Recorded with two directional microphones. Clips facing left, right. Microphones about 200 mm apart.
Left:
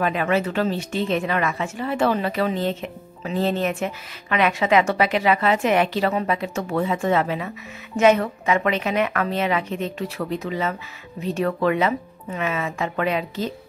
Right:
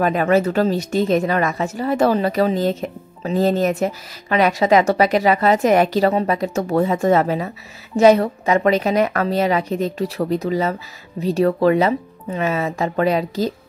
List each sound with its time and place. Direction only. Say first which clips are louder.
0.0 s speech: right 5 dB; 40° right (ahead or behind)